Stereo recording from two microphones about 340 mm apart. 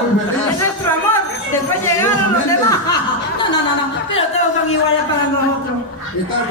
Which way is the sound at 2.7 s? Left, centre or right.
Centre.